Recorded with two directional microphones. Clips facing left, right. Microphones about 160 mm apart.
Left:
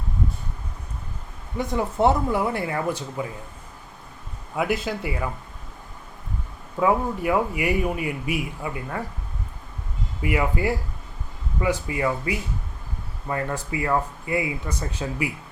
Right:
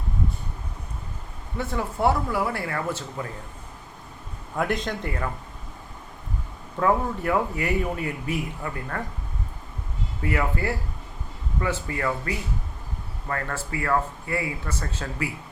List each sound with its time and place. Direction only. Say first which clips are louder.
1.5 s speech: left 4 dB; 20° left (ahead or behind)
4.5 s a man's voice: left 1 dB; 5° left (ahead or behind)
6.7 s a man's voice: left 1 dB; 10° left (ahead or behind)
10.2 s a man's voice: left 2 dB; 15° left (ahead or behind)